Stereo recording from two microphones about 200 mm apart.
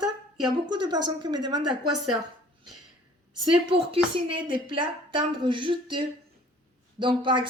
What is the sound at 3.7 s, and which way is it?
A woman's voice, 25° right (ahead or behind).